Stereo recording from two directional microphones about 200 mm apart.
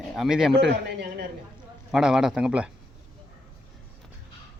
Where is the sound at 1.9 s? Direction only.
5° right (ahead or behind).